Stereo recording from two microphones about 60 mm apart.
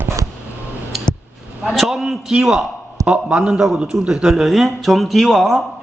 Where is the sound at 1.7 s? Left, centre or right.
Centre.